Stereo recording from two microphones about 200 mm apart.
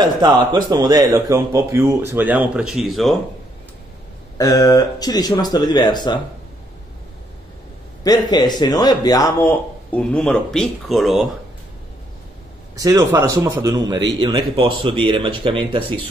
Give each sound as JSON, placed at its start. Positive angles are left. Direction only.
{"t": 0.0, "sound": "a man's voice", "side_deg": -20}
{"t": 4.4, "sound": "speech", "side_deg": 20}
{"t": 8.0, "sound": "speech", "side_deg": 20}
{"t": 12.7, "sound": "a man's voice", "side_deg": -15}